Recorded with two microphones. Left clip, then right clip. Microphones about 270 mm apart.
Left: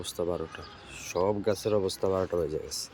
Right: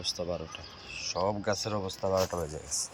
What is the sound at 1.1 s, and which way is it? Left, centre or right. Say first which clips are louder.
Speech: left 3 dB; centre.